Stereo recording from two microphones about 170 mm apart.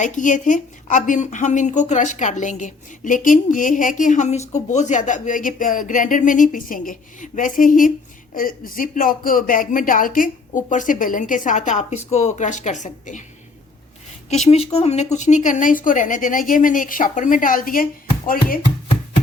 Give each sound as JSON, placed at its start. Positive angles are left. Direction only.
{"t": 0.0, "sound": "a woman's voice", "side_deg": 50}
{"t": 14.5, "sound": "a woman's voice", "side_deg": 40}